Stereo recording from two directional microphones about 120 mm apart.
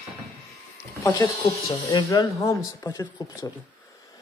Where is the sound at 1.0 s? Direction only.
25° left (ahead or behind).